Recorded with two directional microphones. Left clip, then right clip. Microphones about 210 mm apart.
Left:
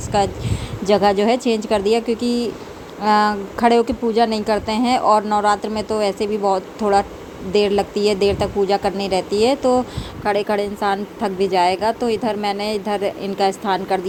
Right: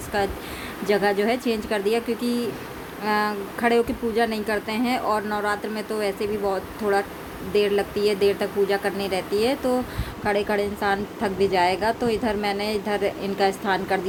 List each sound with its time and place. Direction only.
0.1 s speech: 25° left (ahead or behind)